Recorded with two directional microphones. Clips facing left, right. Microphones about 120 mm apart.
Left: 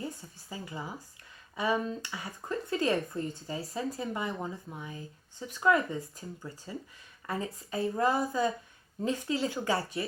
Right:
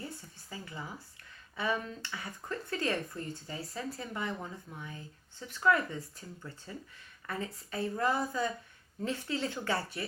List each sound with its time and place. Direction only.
0.5 s speech: 20° left (ahead or behind)